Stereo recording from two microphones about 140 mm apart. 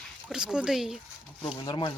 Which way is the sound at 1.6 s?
35° left (ahead or behind).